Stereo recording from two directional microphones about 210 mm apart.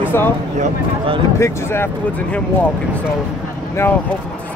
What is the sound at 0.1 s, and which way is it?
Speech, 10° left (ahead or behind).